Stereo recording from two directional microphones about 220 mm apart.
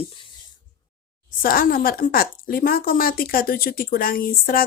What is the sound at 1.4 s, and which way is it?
A woman's voice, 40° left (ahead or behind).